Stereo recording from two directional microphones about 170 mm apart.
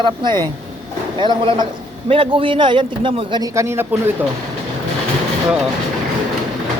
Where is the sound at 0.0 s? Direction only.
25° right (ahead or behind).